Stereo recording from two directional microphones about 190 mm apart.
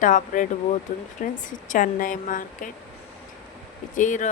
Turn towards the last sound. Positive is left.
turn(degrees=40)  # may be behind; listen again after turning